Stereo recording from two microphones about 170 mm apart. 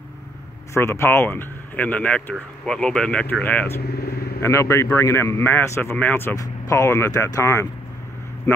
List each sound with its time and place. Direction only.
0.7 s speech: 15° left (ahead or behind)